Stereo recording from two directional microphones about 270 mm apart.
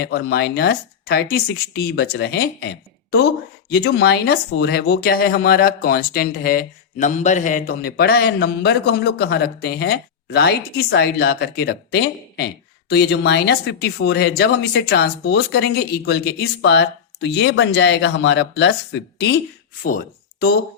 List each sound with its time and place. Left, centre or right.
0.0 s speech: left
3.7 s speech: left